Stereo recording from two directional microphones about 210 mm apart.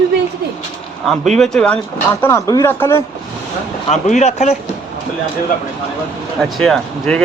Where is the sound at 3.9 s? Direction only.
35° left (ahead or behind).